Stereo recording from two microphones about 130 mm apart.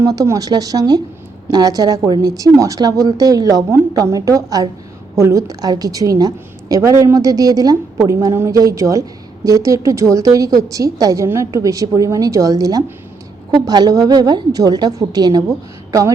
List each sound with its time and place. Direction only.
0.0 s a woman's voice: 25° right (ahead or behind)